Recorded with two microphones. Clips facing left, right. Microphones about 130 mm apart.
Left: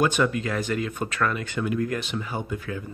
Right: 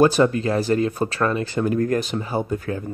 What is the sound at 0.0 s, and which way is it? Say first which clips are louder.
Speech: right 6 dB; 35° right (ahead or behind).